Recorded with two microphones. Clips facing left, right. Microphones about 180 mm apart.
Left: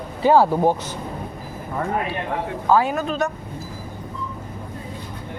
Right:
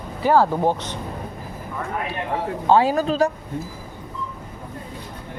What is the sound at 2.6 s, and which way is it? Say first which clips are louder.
Speech: right 2 dB; 30° right (ahead or behind).